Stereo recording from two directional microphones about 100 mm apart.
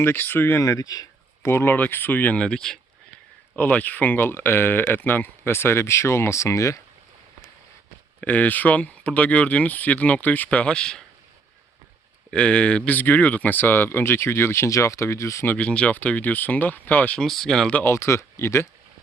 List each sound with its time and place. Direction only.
0.0 s speech: 20° left (ahead or behind)
0.6 s speech: 35° left (ahead or behind)
1.5 s speech: 20° left (ahead or behind)
8.2 s speech: 15° left (ahead or behind)
12.3 s speech: 10° left (ahead or behind); by 15.4 s 30° left (ahead or behind)
15.4 s speech: 10° left (ahead or behind)
17.2 s speech: 5° left (ahead or behind)
17.7 s speech: 25° left (ahead or behind)